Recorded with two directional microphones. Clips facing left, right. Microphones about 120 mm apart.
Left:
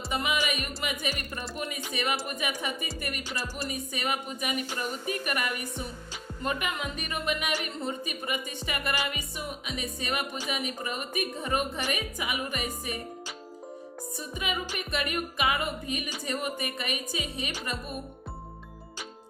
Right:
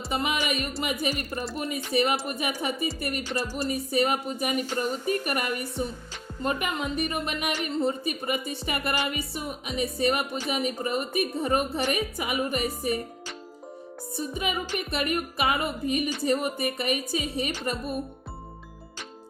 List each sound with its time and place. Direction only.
0.1 s music: 35° right (ahead or behind)
14.2 s music: 30° right (ahead or behind)